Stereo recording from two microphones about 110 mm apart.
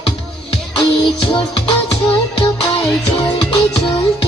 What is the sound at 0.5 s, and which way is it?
Music, 50° left (ahead or behind).